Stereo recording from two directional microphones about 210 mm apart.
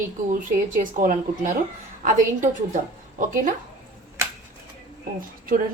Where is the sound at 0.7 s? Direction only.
40° right (ahead or behind).